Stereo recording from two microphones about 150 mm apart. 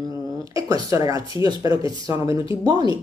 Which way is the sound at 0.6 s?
25° right (ahead or behind).